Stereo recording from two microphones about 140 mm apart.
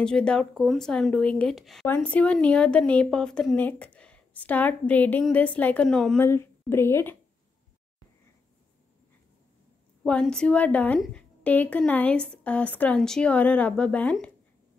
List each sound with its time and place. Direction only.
0.0 s a woman's voice: 5° left (ahead or behind)
6.1 s a woman's voice: 20° left (ahead or behind)
10.0 s a woman's voice: 5° left (ahead or behind)